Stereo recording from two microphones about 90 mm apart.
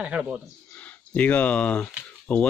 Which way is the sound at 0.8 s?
15° left (ahead or behind).